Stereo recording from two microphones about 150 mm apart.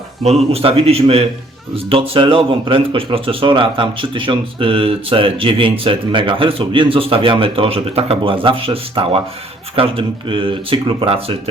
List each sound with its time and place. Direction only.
0.5 s a man's voice: 40° right (ahead or behind)